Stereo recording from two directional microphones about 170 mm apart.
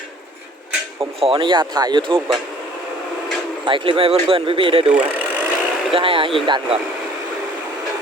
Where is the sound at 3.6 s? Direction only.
30° right (ahead or behind).